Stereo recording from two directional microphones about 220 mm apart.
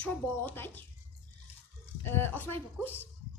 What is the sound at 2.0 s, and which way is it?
Speech, 10° left (ahead or behind).